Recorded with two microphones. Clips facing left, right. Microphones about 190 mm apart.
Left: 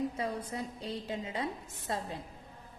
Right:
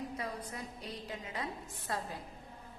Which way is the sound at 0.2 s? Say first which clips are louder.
Left 5 dB; 25° left (ahead or behind).